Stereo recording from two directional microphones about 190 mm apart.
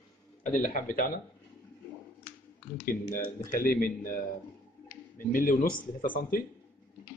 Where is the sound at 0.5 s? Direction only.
45° left (ahead or behind).